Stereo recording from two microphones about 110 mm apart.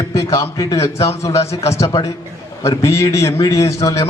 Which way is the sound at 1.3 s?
70° left (ahead or behind).